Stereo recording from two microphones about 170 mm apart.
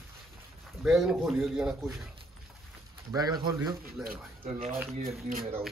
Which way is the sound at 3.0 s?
20° right (ahead or behind).